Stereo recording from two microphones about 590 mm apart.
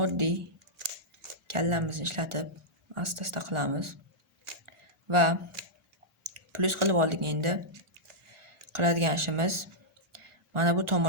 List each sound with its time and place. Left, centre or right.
0.0 s speech: right
1.5 s speech: right
4.6 s a sound: right
6.3 s speech: right
8.7 s speech: right